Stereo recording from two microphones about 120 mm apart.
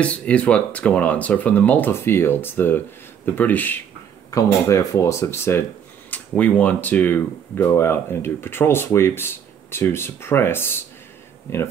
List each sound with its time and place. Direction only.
0.0 s speech: 10° left (ahead or behind)
4.3 s speech: 25° left (ahead or behind)